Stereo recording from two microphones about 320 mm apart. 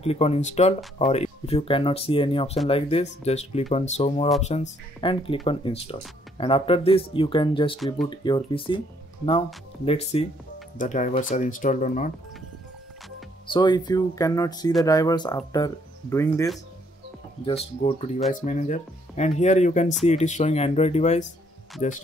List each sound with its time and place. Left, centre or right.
0.0 s speech: centre
7.7 s speech: centre
8.1 s speech: centre
13.5 s speech: centre
17.8 s speech: centre